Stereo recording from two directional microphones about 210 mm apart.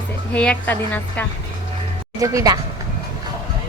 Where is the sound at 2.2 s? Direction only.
15° right (ahead or behind).